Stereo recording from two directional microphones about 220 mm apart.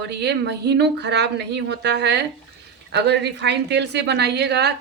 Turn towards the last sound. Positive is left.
turn(degrees=-50)  # may be behind; listen again after turning